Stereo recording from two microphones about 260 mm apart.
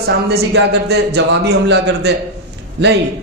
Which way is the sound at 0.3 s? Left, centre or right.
Right.